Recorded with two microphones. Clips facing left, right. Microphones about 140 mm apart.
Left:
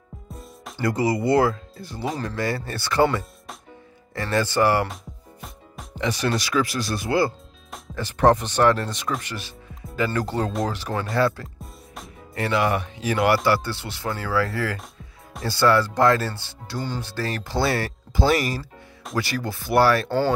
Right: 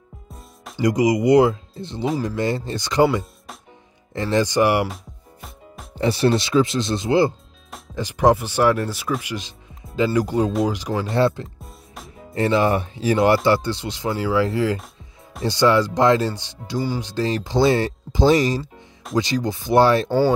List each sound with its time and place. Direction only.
0.7 s speech: 15° right (ahead or behind)
4.8 s music: centre (ahead or behind)
5.9 s speech: 30° right (ahead or behind); by 11.1 s 10° right (ahead or behind)
11.1 s speech: 25° right (ahead or behind)
11.4 s music: centre (ahead or behind)
12.4 s speech: 25° right (ahead or behind)
20.1 s speech: 10° right (ahead or behind)